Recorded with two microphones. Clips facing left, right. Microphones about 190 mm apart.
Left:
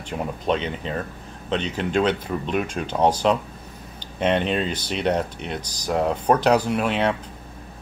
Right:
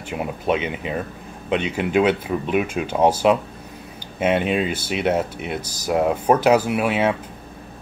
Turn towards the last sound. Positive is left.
turn(degrees=-5)  # may be behind; listen again after turning